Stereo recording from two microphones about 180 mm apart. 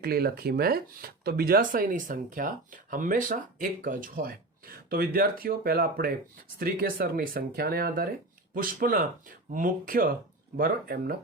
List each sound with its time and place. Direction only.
0.0 s speech: 60° right (ahead or behind)